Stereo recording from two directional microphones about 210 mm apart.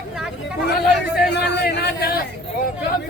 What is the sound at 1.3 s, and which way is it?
Speech, 55° left (ahead or behind).